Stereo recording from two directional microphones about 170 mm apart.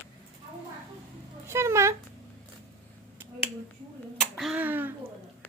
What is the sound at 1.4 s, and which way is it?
Speech, 15° right (ahead or behind).